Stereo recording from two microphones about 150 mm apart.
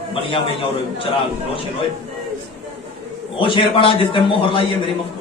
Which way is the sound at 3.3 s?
35° left (ahead or behind).